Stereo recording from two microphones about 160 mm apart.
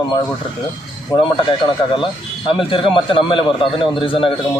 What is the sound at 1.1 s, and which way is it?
A man's voice, 30° left (ahead or behind).